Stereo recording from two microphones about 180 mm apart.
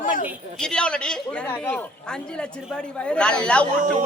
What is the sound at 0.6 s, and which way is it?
A woman's voice, 5° left (ahead or behind).